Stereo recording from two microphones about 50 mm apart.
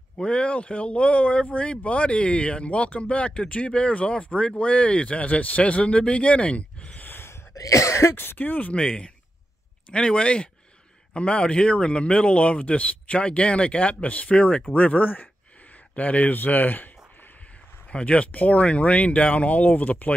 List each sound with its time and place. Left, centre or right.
0.2 s speech: left
7.0 s gasp: left
7.2 s cough: left
8.4 s speech: left
8.7 s speech: left
17.9 s speech: left